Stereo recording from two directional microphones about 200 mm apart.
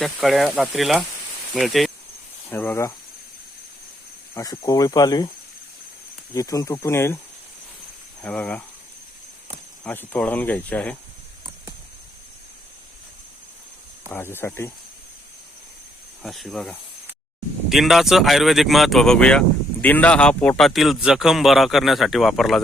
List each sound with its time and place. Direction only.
0.0 s speech: centre (ahead or behind)
2.5 s speech: 10° left (ahead or behind)
4.4 s speech: 15° left (ahead or behind)
6.3 s speech: 15° left (ahead or behind)
8.2 s speech: 5° left (ahead or behind)
9.8 s speech: 10° left (ahead or behind)
14.1 s speech: 10° left (ahead or behind)
16.2 s speech: centre (ahead or behind)